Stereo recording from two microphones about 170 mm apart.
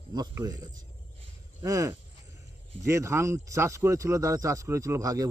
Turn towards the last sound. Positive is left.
turn(degrees=-20)  # may be behind; listen again after turning